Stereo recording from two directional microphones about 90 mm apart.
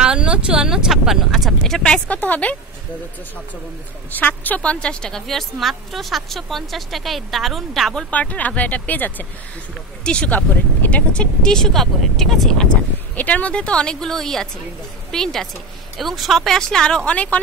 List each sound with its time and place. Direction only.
0.0 s a woman's voice: 10° right (ahead or behind); by 2.1 s 10° left (ahead or behind)
2.1 s speech: 20° left (ahead or behind)
4.1 s a woman's voice: 20° left (ahead or behind); by 8.1 s 5° left (ahead or behind)
8.1 s speech: 15° left (ahead or behind)
13.1 s speech: 15° left (ahead or behind)